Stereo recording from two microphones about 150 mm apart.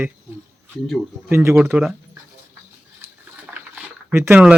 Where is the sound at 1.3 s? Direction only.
15° right (ahead or behind).